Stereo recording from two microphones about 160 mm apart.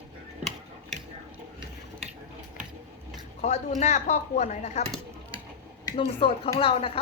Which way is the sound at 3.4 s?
45° left (ahead or behind).